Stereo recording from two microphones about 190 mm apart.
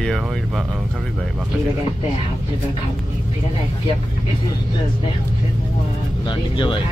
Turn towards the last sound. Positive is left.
turn(degrees=25)  # may be behind; listen again after turning